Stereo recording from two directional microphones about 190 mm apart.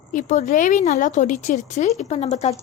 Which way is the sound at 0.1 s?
40° left (ahead or behind).